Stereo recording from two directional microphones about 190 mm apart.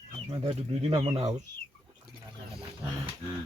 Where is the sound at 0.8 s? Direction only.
30° right (ahead or behind).